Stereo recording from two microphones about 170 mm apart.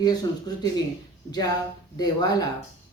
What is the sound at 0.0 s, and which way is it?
Speech, 25° left (ahead or behind).